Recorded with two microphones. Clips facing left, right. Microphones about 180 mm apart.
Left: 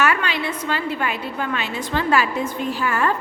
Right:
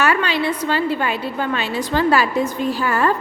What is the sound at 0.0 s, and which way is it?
A woman's voice, 30° right (ahead or behind).